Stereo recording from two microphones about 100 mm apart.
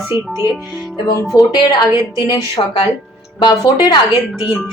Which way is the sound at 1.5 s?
50° left (ahead or behind).